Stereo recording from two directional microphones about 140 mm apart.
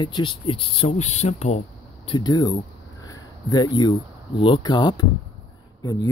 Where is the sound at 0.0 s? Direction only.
35° left (ahead or behind).